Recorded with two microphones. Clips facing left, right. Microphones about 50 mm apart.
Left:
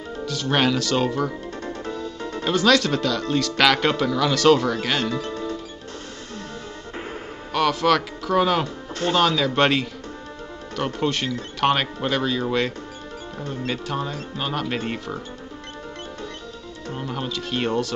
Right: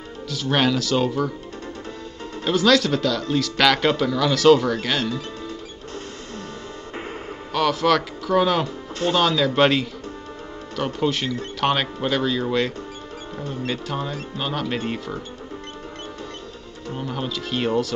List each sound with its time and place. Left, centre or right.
0.2 s speech: centre
1.7 s music: left
2.4 s speech: centre
5.1 s music: left
7.5 s speech: centre
16.9 s speech: centre